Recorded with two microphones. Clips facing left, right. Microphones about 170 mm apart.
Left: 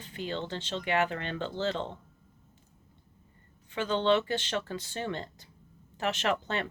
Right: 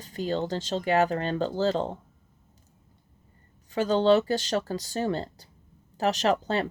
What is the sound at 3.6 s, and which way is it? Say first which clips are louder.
Speech: right 6 dB; 40° right (ahead or behind).